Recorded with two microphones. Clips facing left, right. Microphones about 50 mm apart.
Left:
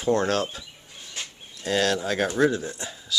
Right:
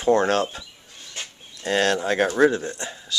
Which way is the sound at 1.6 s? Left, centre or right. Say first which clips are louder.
Right 2 dB; right.